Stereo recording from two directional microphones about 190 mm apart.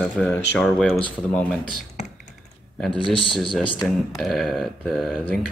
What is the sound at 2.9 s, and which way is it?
Speech, 25° left (ahead or behind).